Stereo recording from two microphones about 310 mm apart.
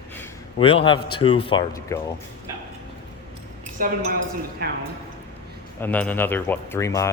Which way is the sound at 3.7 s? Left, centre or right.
Right.